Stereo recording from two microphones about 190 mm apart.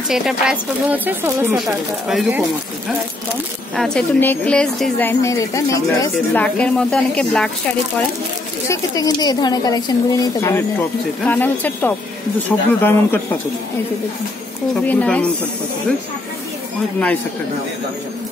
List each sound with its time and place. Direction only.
0.1 s a woman's voice: centre (ahead or behind)
3.7 s a woman's voice: 5° left (ahead or behind)
8.6 s a woman's voice: 20° left (ahead or behind)
14.9 s a woman's voice: 5° left (ahead or behind)